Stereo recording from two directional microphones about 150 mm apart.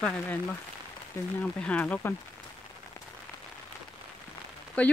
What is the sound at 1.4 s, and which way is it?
Speech, 10° left (ahead or behind).